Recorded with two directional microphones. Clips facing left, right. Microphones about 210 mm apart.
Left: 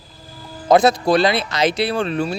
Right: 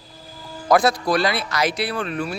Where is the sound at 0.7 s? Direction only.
20° left (ahead or behind).